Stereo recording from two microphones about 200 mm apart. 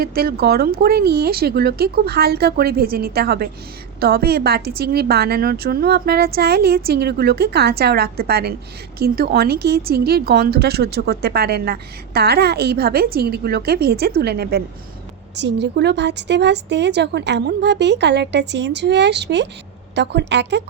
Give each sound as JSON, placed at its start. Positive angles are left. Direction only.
{"t": 0.0, "sound": "speech", "side_deg": -50}